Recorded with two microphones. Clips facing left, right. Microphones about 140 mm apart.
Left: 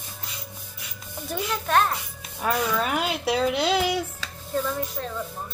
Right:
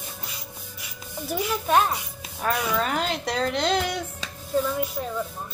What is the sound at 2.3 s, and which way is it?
Speech, 5° left (ahead or behind).